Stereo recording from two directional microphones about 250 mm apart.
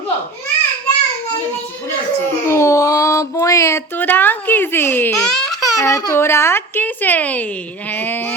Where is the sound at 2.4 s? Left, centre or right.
Centre.